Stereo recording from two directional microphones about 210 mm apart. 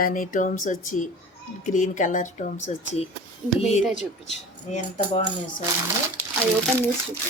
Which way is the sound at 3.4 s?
5° right (ahead or behind).